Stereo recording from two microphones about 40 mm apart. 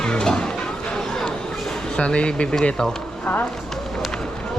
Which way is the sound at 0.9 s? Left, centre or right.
Centre.